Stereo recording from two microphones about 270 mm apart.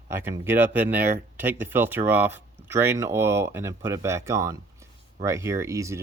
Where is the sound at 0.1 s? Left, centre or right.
Centre.